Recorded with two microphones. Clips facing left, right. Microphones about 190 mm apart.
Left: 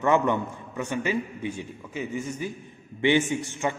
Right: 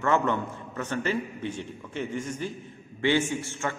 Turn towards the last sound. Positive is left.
turn(degrees=15)  # may be behind; listen again after turning